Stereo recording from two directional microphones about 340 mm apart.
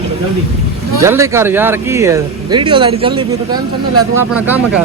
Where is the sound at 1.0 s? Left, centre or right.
Centre.